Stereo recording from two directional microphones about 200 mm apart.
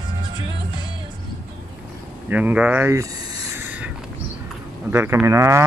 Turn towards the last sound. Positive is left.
turn(degrees=-15)  # may be behind; listen again after turning